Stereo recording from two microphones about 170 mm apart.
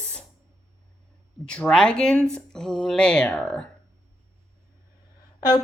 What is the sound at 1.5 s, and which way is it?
Speech, 5° left (ahead or behind).